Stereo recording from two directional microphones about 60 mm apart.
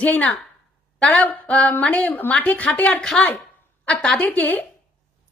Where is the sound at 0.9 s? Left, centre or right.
Left.